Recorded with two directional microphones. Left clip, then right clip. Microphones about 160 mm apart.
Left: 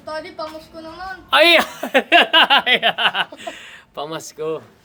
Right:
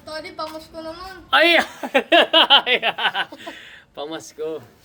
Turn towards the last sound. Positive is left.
turn(degrees=40)  # may be behind; listen again after turning